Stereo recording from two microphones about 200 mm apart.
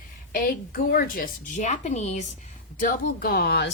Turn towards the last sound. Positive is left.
turn(degrees=55)  # may be behind; listen again after turning